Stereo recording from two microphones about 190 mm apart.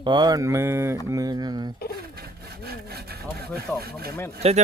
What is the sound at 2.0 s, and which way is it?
Speech, 55° right (ahead or behind).